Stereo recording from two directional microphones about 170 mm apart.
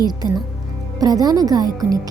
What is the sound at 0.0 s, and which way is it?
Speech, 25° right (ahead or behind).